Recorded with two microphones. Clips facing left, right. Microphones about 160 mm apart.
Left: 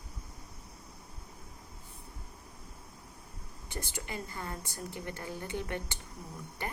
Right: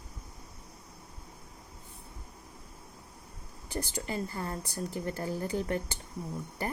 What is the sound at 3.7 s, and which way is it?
A woman's voice, 35° right (ahead or behind).